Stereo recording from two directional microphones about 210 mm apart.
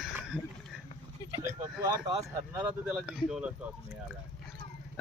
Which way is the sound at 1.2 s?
15° left (ahead or behind).